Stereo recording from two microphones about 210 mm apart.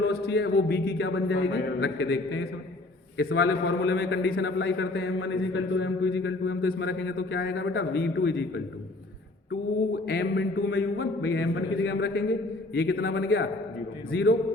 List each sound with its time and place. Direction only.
0.0 s a man's voice: 50° left (ahead or behind); by 10.8 s 70° left (ahead or behind)
10.9 s speech: 50° left (ahead or behind)
11.5 s a man's voice: 65° left (ahead or behind)